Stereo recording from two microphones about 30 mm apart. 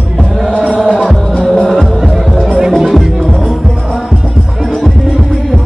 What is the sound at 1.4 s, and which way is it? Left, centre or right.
Music, centre.